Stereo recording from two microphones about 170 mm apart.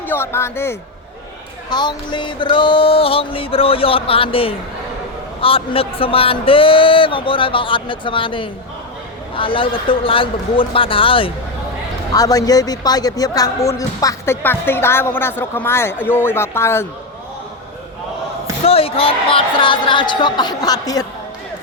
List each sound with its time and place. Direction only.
0.0 s speech: 15° left (ahead or behind)
1.7 s a man's voice: 25° left (ahead or behind)
12.1 s speech: 20° left (ahead or behind)
18.6 s a man's voice: 35° left (ahead or behind)